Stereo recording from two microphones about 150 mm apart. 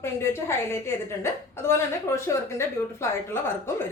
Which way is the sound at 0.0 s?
15° left (ahead or behind).